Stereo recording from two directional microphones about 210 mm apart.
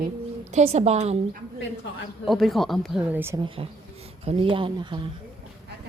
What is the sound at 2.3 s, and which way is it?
A woman's voice, centre (ahead or behind).